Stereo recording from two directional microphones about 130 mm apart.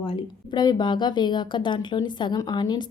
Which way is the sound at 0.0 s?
40° left (ahead or behind).